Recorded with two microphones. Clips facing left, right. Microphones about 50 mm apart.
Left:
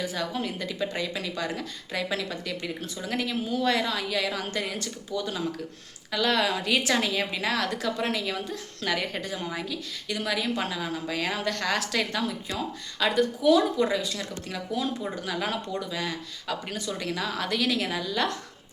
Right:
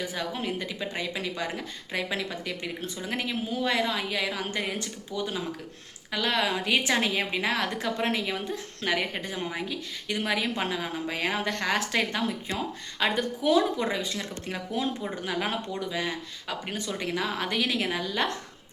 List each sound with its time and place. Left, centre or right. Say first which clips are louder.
0.0 s a woman's voice: left 1 dB; centre